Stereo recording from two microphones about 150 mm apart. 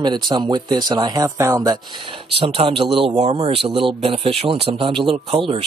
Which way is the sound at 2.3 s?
35° right (ahead or behind).